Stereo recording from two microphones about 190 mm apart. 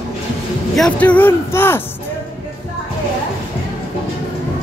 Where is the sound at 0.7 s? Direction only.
5° left (ahead or behind).